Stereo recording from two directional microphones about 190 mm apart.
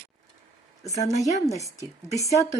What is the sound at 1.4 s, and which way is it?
Speech, 15° left (ahead or behind).